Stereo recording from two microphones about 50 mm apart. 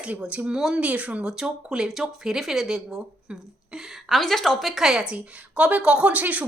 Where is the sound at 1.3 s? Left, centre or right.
Centre.